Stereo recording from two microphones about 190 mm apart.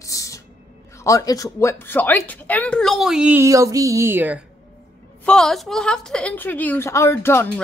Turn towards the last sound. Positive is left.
turn(degrees=10)  # may be behind; listen again after turning